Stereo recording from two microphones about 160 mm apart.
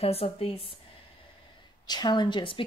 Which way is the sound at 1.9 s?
25° left (ahead or behind).